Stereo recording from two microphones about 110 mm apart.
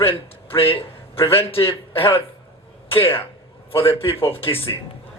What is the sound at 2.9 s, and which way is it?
Speech, 55° left (ahead or behind).